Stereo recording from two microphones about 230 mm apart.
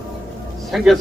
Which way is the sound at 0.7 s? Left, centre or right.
Centre.